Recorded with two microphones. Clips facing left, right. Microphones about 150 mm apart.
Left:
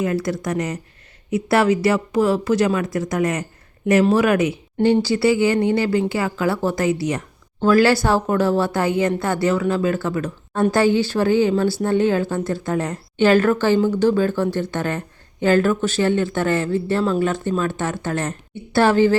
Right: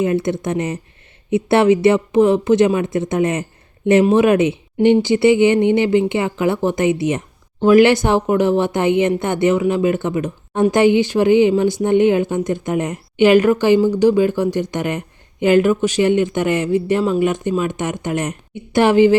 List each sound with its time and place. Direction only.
0.0 s speech: 25° right (ahead or behind)